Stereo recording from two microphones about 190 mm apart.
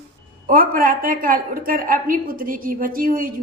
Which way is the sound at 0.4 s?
50° right (ahead or behind).